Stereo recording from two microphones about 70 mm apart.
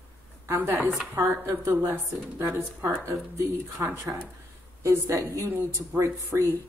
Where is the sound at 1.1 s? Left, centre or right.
Right.